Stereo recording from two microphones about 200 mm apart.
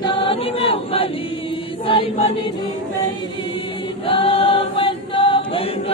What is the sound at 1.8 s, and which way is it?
Chant, 30° left (ahead or behind).